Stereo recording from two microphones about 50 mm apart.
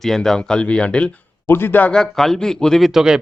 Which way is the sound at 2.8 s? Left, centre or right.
Centre.